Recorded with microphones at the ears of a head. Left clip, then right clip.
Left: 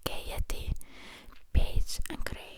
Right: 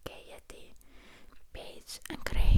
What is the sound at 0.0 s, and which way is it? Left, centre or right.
Whispering, left.